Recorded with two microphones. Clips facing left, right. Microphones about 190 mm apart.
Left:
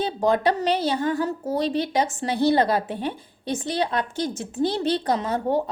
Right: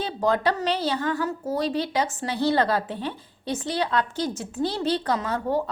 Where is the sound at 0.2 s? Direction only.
20° left (ahead or behind).